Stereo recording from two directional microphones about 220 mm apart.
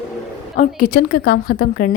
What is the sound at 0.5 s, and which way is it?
Speech, 35° left (ahead or behind).